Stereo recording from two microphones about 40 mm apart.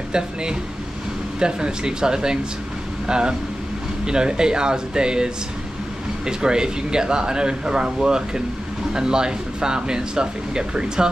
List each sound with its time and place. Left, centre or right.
0.1 s speech: right